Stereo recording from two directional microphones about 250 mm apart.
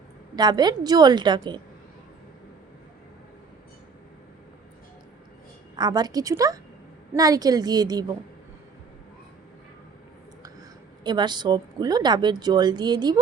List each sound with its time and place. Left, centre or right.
0.3 s a woman's voice: centre
5.7 s a woman's voice: centre
11.0 s a woman's voice: centre